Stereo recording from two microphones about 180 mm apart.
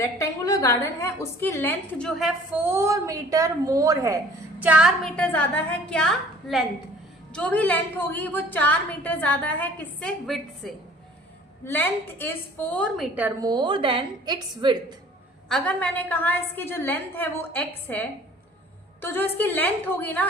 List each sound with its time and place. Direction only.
0.0 s a woman's voice: 20° left (ahead or behind); by 2.3 s centre (ahead or behind)
2.6 s a woman's voice: 15° right (ahead or behind)
5.0 s a woman's voice: 5° left (ahead or behind)
11.6 s a woman's voice: 10° left (ahead or behind)
13.4 s a woman's voice: 25° right (ahead or behind)
15.4 s a woman's voice: 5° left (ahead or behind)